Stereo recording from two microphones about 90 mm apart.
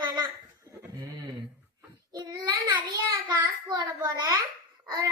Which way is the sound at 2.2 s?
55° right (ahead or behind).